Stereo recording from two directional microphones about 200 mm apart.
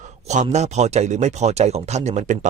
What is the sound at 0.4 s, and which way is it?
Speech, 35° right (ahead or behind).